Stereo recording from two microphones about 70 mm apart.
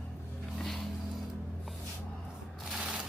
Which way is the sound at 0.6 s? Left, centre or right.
Centre.